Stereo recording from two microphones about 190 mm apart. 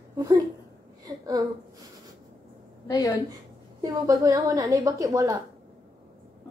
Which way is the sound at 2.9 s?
20° left (ahead or behind).